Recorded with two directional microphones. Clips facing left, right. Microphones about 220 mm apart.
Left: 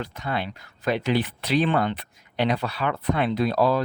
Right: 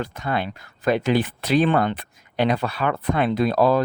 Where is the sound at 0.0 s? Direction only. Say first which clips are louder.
Right 3 dB; 50° right (ahead or behind).